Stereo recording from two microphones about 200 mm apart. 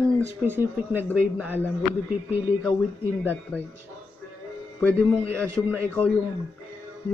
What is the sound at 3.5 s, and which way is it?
Speech, 10° left (ahead or behind).